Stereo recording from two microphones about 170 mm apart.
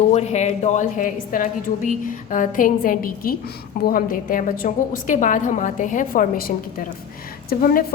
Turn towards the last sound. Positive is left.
turn(degrees=60)  # may be behind; listen again after turning